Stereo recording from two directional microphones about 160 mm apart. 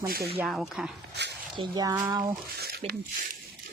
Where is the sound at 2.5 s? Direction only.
80° right.